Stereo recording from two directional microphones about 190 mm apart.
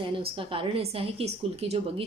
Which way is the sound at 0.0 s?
30° right (ahead or behind).